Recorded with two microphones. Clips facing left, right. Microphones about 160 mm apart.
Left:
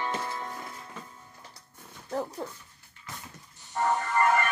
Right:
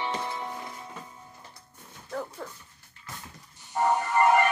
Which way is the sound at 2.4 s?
30° left (ahead or behind).